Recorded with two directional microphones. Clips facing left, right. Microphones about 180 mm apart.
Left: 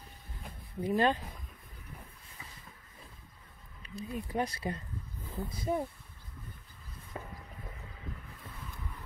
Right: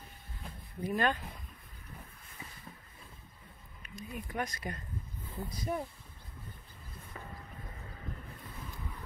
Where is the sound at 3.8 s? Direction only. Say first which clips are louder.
Left 4 dB; 30° left (ahead or behind).